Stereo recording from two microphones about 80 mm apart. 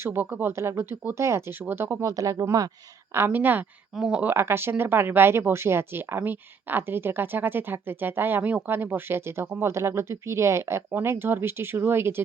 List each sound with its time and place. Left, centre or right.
0.0 s speech: right
0.3 s speech: right
0.5 s speech: right
2.0 s speech: right
3.2 s speech: right
3.9 s speech: centre
4.2 s speech: right